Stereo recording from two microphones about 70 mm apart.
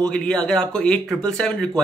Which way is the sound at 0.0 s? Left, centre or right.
Centre.